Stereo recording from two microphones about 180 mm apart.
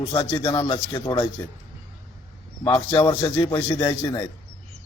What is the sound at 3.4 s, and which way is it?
Speech, 10° left (ahead or behind).